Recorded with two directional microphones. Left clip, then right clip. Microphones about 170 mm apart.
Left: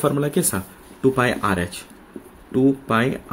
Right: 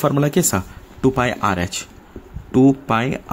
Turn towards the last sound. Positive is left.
turn(degrees=-45)  # may be behind; listen again after turning